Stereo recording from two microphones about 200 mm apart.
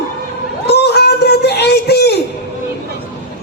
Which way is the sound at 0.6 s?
55° left (ahead or behind).